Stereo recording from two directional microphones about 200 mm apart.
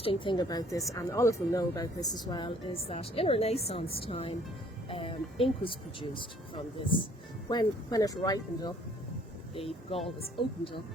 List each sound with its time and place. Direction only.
0.0 s a woman's voice: 25° left (ahead or behind)